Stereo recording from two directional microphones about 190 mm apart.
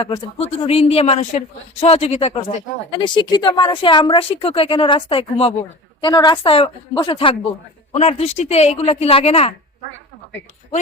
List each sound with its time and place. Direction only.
0.0 s speech: 30° left (ahead or behind)